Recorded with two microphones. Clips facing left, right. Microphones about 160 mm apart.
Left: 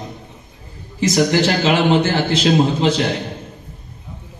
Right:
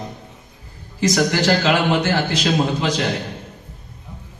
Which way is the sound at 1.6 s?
25° left (ahead or behind).